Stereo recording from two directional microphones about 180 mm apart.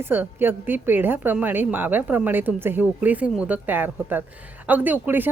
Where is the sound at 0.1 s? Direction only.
10° right (ahead or behind).